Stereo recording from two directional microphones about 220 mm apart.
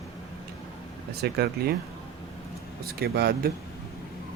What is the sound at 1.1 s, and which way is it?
Speech, 45° right (ahead or behind).